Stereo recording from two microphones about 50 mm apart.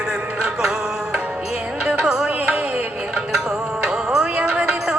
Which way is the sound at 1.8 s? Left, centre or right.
Right.